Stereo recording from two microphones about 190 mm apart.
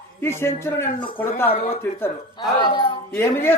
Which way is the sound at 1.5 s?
35° left (ahead or behind).